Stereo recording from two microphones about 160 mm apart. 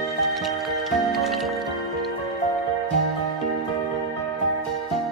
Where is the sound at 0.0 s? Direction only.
Centre (ahead or behind).